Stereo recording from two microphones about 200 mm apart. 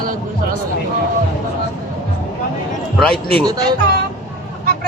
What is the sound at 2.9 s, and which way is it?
Speech, centre (ahead or behind).